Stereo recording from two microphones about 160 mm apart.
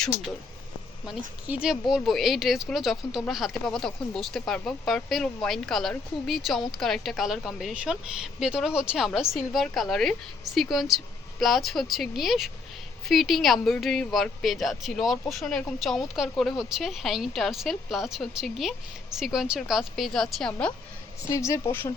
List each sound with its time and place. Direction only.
1.5 s a woman's voice: 5° right (ahead or behind)
21.2 s a woman's voice: 20° left (ahead or behind)